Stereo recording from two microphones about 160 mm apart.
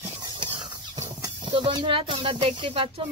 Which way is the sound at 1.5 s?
30° right (ahead or behind).